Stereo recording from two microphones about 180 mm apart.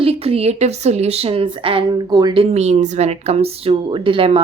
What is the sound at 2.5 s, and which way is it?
Speech, 35° right (ahead or behind).